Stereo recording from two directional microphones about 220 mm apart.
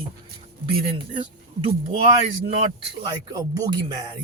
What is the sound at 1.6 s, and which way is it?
A man's voice, 25° right (ahead or behind).